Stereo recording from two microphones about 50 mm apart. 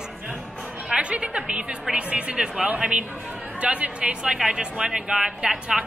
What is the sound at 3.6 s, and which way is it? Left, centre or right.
Speech, right.